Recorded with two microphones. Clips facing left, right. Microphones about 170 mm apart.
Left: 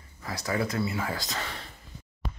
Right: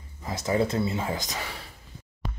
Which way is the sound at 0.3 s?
25° right (ahead or behind).